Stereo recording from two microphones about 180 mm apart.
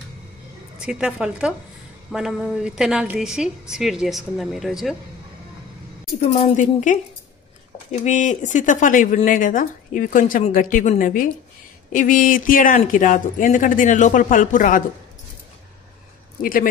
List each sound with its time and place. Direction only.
0.7 s a woman's voice: 5° right (ahead or behind)
6.2 s speech: 35° left (ahead or behind)